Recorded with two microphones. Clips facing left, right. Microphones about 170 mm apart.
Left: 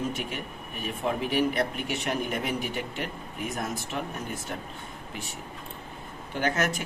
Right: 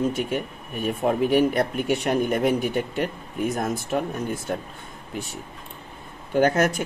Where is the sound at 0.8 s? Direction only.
50° right (ahead or behind).